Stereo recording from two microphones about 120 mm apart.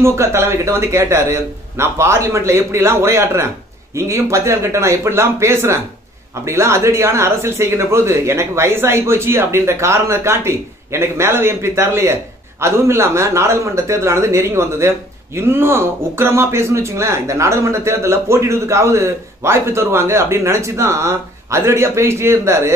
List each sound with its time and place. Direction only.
0.0 s speech: 20° right (ahead or behind)